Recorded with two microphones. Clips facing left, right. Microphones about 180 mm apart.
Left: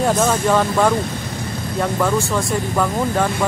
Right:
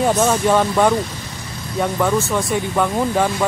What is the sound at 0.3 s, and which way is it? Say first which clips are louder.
Speech: right 1 dB; 5° right (ahead or behind).